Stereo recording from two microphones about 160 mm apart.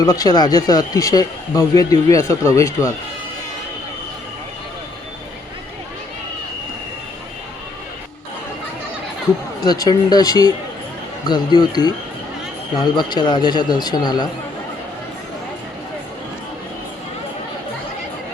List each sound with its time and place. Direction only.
0.0 s speech: 25° left (ahead or behind)
9.6 s speech: 25° left (ahead or behind)